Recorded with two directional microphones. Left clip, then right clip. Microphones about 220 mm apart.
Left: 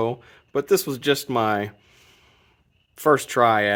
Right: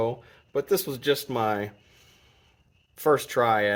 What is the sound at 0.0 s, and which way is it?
Speech, 55° left (ahead or behind).